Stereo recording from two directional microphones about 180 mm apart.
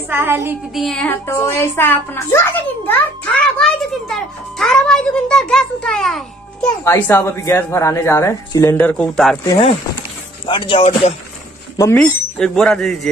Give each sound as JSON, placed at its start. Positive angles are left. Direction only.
{"t": 0.1, "sound": "child singing", "side_deg": -15}
{"t": 0.7, "sound": "a child's voice", "side_deg": 5}
{"t": 6.6, "sound": "speech", "side_deg": 15}
{"t": 9.4, "sound": "speech", "side_deg": 20}
{"t": 12.0, "sound": "a child's voice", "side_deg": 5}